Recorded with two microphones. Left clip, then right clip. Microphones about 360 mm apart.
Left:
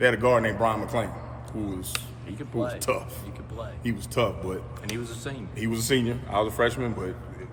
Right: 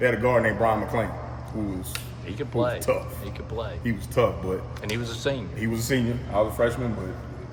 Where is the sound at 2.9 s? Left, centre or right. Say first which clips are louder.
Right 1 dB; centre.